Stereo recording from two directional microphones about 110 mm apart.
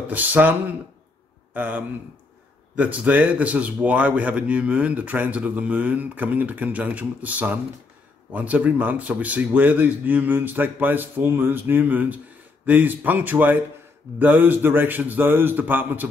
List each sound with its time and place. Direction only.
0.1 s speech: 15° right (ahead or behind)